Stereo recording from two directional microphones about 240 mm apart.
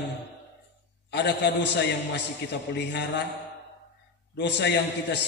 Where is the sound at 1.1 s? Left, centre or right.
Left.